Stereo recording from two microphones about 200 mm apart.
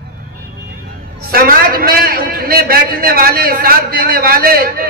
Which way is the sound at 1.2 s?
45° right (ahead or behind).